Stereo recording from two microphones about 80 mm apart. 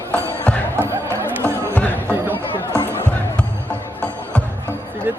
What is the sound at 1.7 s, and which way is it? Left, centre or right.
Music, left.